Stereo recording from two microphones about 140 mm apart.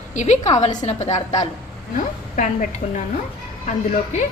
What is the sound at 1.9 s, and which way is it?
Speech, 65° left (ahead or behind).